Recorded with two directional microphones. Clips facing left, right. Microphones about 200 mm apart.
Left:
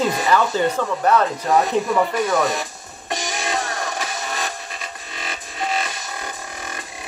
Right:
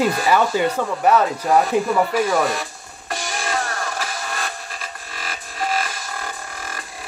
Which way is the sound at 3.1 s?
20° left (ahead or behind).